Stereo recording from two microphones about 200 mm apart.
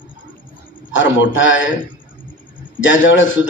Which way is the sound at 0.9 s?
70° left (ahead or behind).